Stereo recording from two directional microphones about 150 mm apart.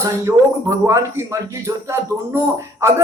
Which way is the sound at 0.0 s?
20° right (ahead or behind).